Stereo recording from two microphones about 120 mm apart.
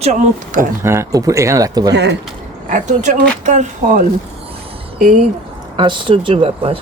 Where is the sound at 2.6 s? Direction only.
85° right.